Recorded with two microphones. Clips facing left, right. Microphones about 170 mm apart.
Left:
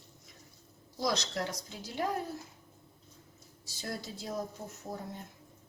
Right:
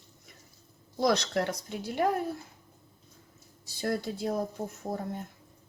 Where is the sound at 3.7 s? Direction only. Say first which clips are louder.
Right 9 dB; 55° right (ahead or behind).